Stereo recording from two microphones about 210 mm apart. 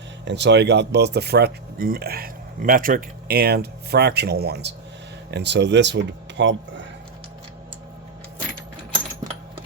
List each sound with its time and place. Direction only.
0.3 s speech: 55° right (ahead or behind)